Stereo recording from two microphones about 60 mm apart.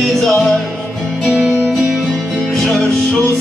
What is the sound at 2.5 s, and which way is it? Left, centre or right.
Music, centre.